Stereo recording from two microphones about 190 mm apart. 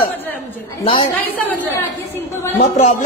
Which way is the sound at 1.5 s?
10° left (ahead or behind).